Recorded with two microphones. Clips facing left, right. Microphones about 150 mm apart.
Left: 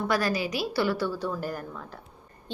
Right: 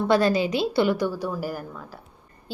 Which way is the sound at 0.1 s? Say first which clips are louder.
Right 8 dB; 25° right (ahead or behind).